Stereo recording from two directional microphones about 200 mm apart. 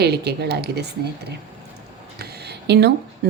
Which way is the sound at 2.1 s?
55° right (ahead or behind).